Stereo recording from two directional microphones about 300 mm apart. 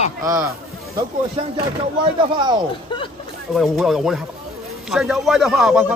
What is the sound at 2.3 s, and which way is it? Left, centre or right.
Speech, centre.